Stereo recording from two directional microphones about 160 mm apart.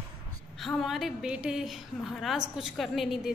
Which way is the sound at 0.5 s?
Centre (ahead or behind).